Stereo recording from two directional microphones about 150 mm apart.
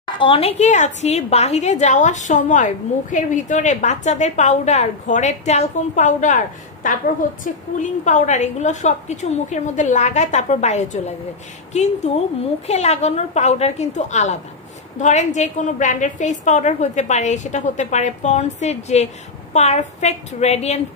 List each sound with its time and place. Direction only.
0.0 s a woman's voice: 35° left (ahead or behind)